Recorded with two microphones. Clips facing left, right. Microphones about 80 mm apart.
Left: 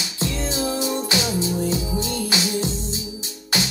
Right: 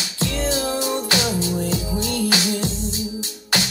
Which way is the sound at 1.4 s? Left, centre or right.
Left.